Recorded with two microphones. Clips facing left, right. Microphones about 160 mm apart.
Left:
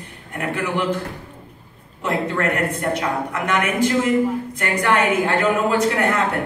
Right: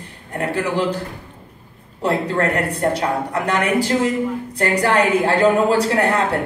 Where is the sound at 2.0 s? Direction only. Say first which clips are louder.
Right 2 dB; 35° right (ahead or behind).